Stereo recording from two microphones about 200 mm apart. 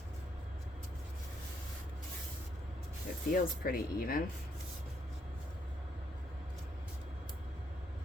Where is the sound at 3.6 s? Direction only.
45° left (ahead or behind).